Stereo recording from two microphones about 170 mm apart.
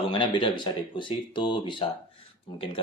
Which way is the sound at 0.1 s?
30° left (ahead or behind).